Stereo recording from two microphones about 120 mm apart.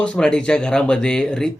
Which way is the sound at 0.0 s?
10° left (ahead or behind).